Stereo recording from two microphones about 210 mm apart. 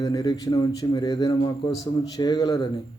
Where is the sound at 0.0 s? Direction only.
15° left (ahead or behind).